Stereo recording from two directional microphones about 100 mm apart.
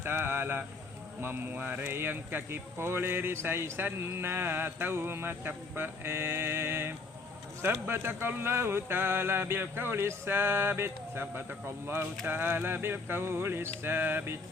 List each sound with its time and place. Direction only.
0.0 s speech: 25° right (ahead or behind)